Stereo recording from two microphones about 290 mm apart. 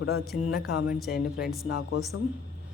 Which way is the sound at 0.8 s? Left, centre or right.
Centre.